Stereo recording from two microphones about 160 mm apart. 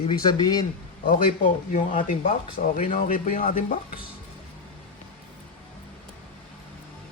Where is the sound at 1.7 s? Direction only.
50° left (ahead or behind).